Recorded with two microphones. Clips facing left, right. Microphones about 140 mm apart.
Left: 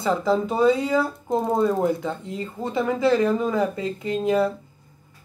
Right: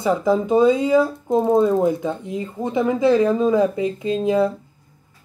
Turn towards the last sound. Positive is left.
turn(degrees=-20)  # may be behind; listen again after turning